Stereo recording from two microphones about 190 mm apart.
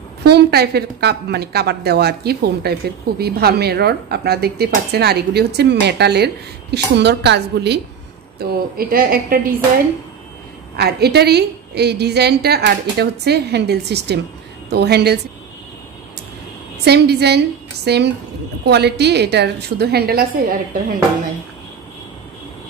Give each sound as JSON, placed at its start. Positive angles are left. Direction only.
{"t": 0.2, "sound": "a woman's voice", "side_deg": -60}
{"t": 10.8, "sound": "a woman's voice", "side_deg": -60}
{"t": 16.8, "sound": "a woman's voice", "side_deg": -60}